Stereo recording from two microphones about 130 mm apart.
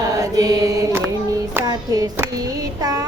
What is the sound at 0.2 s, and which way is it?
Mantra, 25° right (ahead or behind).